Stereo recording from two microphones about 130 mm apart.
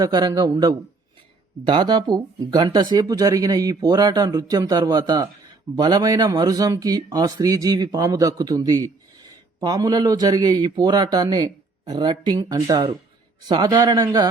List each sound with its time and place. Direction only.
0.0 s speech: 30° right (ahead or behind)